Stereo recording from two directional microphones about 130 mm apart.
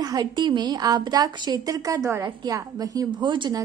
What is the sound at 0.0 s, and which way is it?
A woman's voice, 30° right (ahead or behind).